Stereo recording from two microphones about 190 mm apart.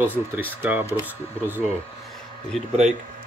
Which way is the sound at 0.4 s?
10° right (ahead or behind).